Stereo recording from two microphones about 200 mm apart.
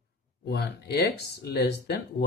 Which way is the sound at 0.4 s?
55° left (ahead or behind).